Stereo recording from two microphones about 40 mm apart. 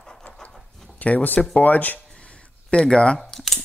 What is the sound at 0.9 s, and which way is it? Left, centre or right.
Speech, left.